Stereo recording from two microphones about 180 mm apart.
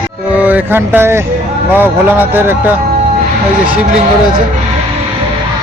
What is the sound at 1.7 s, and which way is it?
Speech, 10° right (ahead or behind).